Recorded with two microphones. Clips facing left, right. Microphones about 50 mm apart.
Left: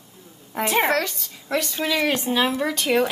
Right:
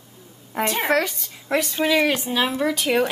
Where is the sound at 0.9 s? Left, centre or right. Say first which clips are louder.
Right 2 dB; centre.